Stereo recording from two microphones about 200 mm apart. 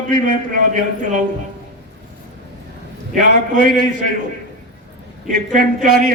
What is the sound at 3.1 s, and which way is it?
Speech, 40° right (ahead or behind).